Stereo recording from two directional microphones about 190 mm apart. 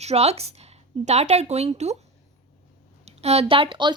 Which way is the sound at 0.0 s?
35° right (ahead or behind).